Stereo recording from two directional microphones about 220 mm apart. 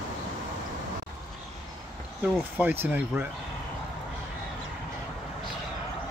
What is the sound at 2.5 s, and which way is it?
Speech, 5° right (ahead or behind).